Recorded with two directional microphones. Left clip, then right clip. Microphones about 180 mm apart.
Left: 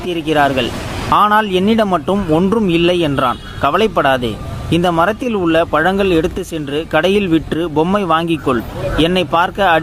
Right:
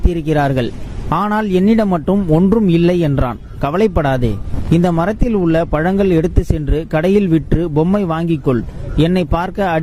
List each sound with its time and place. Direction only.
0.1 s speech: 50° right (ahead or behind)